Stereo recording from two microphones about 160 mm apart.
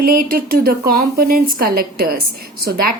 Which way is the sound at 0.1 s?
65° right (ahead or behind).